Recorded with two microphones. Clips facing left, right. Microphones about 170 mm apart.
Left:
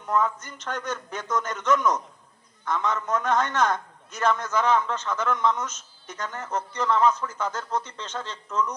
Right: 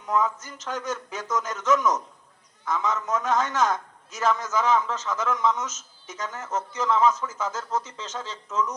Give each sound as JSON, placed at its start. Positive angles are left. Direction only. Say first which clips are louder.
{"t": 0.1, "sound": "a man's voice", "louder": "even", "side_deg": -5}